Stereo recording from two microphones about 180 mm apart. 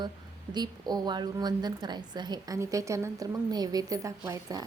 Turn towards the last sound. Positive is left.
turn(degrees=-20)  # may be behind; listen again after turning